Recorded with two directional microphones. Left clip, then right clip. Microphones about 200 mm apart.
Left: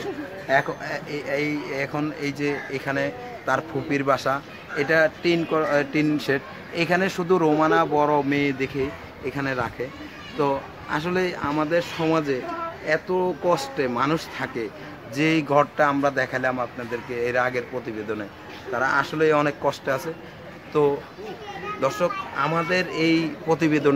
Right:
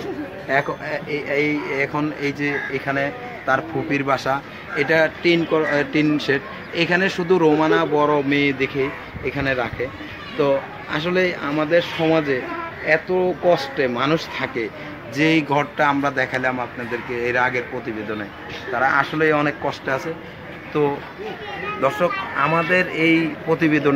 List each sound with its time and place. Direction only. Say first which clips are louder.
0.5 s speech: right 1 dB; 45° left (ahead or behind)
18.8 s a man's voice: right 3 dB; 55° left (ahead or behind)
22.7 s a man's voice: right 4 dB; 55° left (ahead or behind)